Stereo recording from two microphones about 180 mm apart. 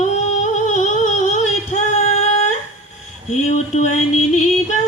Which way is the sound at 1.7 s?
40° left (ahead or behind).